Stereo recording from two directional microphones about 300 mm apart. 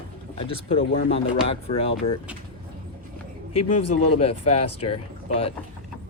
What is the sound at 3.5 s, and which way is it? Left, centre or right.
Speech, left.